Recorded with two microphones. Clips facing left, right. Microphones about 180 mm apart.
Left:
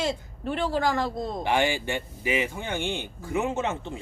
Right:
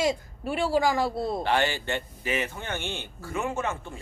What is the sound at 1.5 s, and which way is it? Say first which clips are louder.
Speech: left 4 dB; 15° left (ahead or behind).